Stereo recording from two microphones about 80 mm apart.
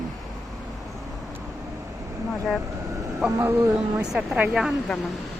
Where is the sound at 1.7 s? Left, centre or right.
Right.